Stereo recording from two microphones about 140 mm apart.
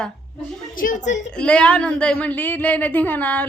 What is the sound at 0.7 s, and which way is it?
Speech, 75° left (ahead or behind).